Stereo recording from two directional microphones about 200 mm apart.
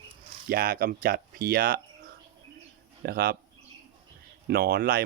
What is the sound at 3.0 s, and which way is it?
Speech, 50° right (ahead or behind).